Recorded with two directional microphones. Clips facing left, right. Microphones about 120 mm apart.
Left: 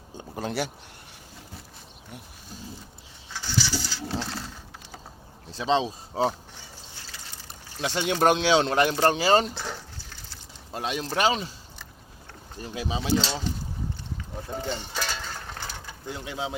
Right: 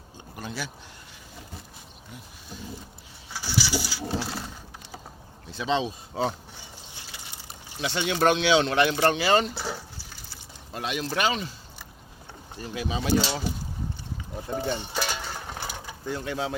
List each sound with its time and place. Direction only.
0.2 s a sound: 90° left
3.3 s pigeon: 10° right (ahead or behind)
5.5 s speech: 35° left (ahead or behind)
6.9 s a sound: 15° right (ahead or behind)
7.8 s speech: 45° left (ahead or behind)
9.6 s liquid: 10° right (ahead or behind)
10.8 s speech: 35° left (ahead or behind)
12.7 s speech: 35° left (ahead or behind)
13.0 s speech: 10° right (ahead or behind)
14.5 s a sound: 15° right (ahead or behind)
16.0 s speech: 15° left (ahead or behind)